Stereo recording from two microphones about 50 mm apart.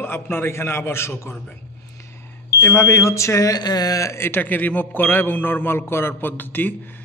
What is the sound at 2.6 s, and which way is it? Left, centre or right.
Speech, left.